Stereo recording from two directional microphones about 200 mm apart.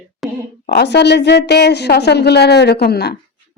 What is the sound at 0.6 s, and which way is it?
A woman's voice, 55° left (ahead or behind).